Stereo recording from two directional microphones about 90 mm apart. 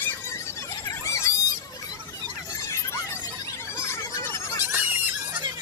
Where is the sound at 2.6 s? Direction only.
30° left (ahead or behind).